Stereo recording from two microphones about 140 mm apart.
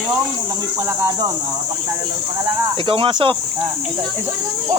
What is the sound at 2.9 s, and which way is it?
Speech, 40° right (ahead or behind).